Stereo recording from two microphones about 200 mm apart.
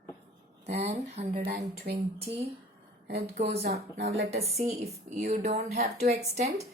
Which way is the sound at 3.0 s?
55° right (ahead or behind).